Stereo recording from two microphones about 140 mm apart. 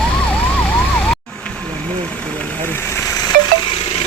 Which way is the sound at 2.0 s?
10° left (ahead or behind).